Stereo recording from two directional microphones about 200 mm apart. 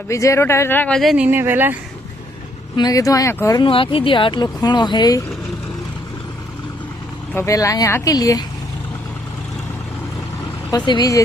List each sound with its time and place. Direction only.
0.1 s speech: 15° left (ahead or behind); by 1.8 s 10° right (ahead or behind)
2.7 s speech: 20° left (ahead or behind)
7.3 s a woman's voice: 15° left (ahead or behind)
10.7 s speech: 20° left (ahead or behind)